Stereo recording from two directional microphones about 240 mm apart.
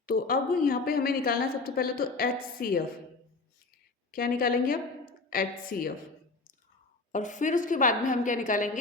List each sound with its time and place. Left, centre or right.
0.0 s a woman's voice: left
4.1 s a woman's voice: left
7.1 s a woman's voice: left